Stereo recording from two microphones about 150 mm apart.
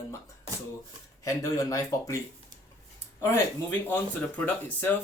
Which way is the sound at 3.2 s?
15° left (ahead or behind).